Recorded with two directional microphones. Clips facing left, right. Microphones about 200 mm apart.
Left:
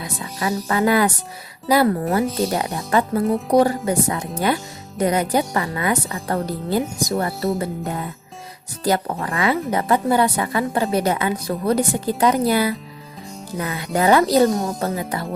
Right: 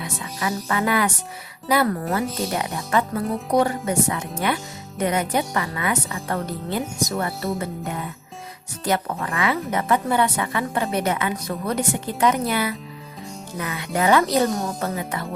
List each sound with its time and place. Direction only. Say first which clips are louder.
0.0 s speech: left 2 dB; 35° left (ahead or behind)